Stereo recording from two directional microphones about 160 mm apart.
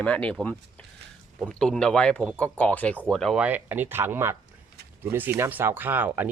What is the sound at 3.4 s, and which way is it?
Speech, 10° right (ahead or behind).